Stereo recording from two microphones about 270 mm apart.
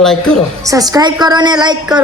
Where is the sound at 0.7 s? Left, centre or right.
Centre.